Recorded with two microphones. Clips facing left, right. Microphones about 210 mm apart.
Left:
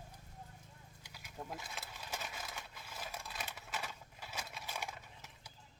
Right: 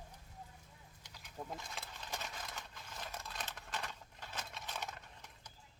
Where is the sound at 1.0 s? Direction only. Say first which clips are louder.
Even; 10° left (ahead or behind).